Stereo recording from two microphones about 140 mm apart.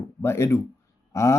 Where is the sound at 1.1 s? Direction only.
20° left (ahead or behind).